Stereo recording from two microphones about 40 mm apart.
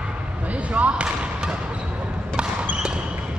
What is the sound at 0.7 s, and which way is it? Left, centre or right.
Basketball bounce, right.